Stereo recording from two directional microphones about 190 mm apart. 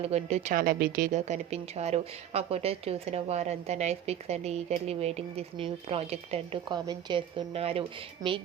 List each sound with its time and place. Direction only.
0.1 s a woman's voice: 35° right (ahead or behind)